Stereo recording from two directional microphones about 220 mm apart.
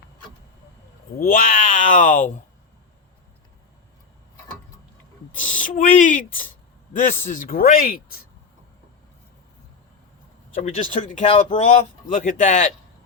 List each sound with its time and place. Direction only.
1.2 s speech: 40° left (ahead or behind)
5.3 s speech: 35° left (ahead or behind)
10.5 s speech: 35° left (ahead or behind)